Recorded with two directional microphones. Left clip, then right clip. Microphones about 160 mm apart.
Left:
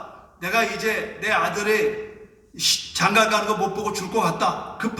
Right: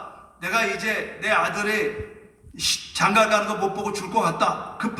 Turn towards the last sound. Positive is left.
turn(degrees=-25)  # may be behind; listen again after turning